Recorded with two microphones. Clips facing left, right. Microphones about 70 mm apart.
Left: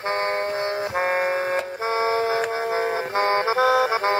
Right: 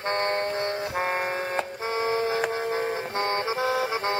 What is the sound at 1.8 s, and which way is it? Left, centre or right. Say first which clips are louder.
Printer: left 4 dB; left.